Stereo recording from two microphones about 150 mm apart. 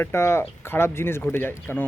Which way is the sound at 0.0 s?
15° left (ahead or behind).